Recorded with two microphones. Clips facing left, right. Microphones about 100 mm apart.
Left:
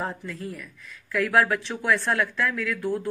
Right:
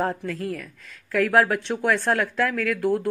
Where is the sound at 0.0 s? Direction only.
60° right (ahead or behind).